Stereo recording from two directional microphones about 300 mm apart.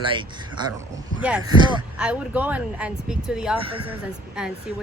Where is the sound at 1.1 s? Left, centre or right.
Centre.